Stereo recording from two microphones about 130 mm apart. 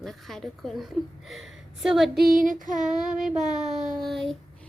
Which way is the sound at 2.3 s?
90° right.